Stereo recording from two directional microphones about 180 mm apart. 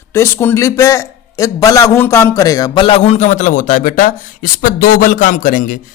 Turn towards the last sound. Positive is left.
turn(degrees=50)  # may be behind; listen again after turning